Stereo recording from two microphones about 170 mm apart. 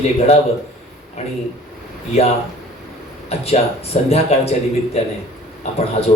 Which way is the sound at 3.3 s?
40° left (ahead or behind).